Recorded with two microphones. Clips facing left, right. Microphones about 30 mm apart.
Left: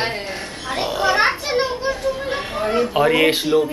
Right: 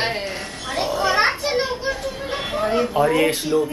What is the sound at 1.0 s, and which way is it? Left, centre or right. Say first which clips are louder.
Children playing: left 2 dB; centre.